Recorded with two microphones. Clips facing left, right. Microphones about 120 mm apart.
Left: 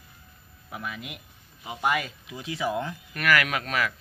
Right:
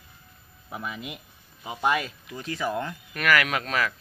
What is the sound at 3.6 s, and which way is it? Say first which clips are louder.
Speech: right 1 dB; 40° right (ahead or behind).